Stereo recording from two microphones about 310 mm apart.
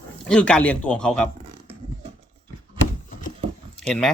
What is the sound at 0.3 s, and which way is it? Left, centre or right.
Speech, centre.